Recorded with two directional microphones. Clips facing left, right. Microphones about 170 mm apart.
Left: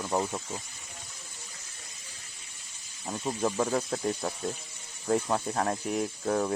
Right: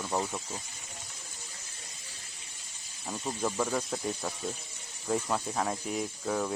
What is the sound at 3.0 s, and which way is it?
Speech, centre (ahead or behind).